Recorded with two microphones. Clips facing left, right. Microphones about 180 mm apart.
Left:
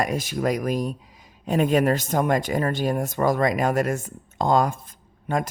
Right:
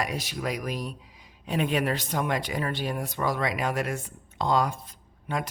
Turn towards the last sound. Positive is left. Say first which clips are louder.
# left 6 dB
turn(degrees=45)  # may be behind; listen again after turning